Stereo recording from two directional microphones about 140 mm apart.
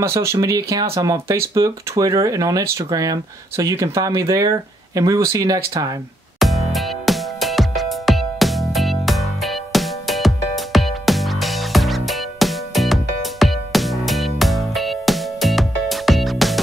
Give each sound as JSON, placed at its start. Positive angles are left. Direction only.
{"t": 0.0, "sound": "speech", "side_deg": -20}
{"t": 6.4, "sound": "music", "side_deg": 0}